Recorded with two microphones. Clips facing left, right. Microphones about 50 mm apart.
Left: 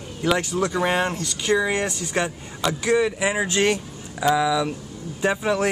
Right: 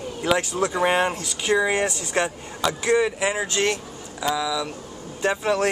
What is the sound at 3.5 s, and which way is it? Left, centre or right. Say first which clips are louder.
Speech: left 2 dB; centre.